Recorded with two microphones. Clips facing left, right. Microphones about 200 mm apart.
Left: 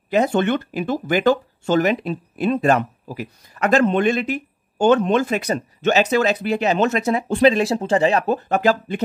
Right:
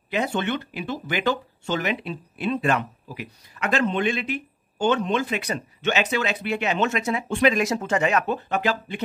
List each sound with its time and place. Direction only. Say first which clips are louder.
0.1 s speech: left 7 dB; 45° left (ahead or behind)